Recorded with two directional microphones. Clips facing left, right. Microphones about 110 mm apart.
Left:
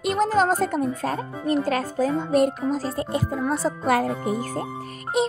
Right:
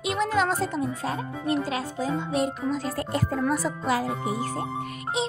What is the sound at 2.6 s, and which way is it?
Speech, 35° left (ahead or behind).